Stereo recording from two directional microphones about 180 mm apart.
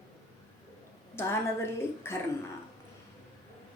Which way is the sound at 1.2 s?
15° left (ahead or behind).